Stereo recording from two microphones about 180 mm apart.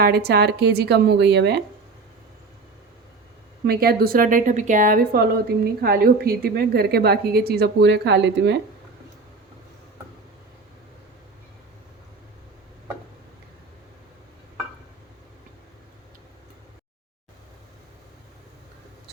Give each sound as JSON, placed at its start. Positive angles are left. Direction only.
{"t": 0.0, "sound": "a woman's voice", "side_deg": -60}
{"t": 3.7, "sound": "a woman's voice", "side_deg": -55}